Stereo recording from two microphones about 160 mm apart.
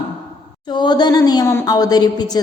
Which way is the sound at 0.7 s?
25° left (ahead or behind).